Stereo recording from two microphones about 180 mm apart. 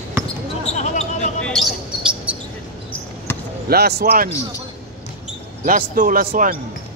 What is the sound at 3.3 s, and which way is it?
Basketball bounce, 15° left (ahead or behind).